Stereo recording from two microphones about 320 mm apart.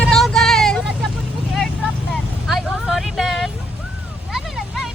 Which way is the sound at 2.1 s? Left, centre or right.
Centre.